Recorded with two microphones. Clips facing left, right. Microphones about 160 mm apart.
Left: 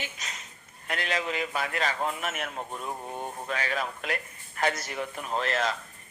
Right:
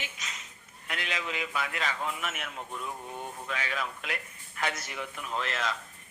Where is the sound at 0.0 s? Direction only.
40° left (ahead or behind).